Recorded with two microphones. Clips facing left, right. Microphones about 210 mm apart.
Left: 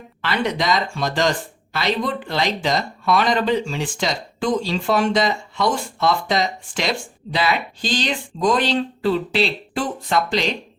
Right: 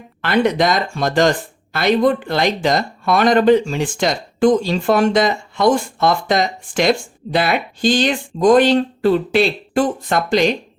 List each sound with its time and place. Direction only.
0.2 s speech: 50° right (ahead or behind)